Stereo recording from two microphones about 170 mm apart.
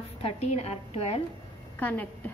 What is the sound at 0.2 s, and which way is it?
A woman's voice, 40° left (ahead or behind).